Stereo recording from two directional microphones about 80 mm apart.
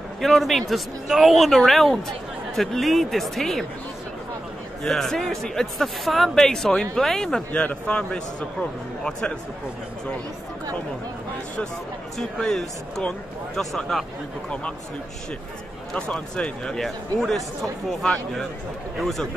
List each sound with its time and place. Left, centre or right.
0.2 s speech: centre
4.8 s a man's voice: centre
12.2 s speech: centre
15.9 s a man's voice: centre